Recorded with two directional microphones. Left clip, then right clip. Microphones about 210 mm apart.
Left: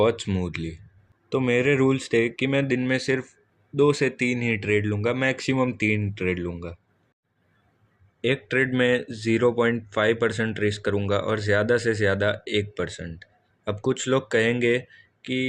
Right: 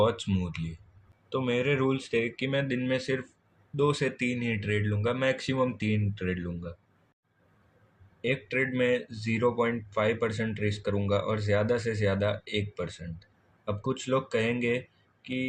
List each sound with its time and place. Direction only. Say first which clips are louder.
0.0 s speech: left 4 dB; 45° left (ahead or behind)
8.2 s speech: left 6 dB; 50° left (ahead or behind)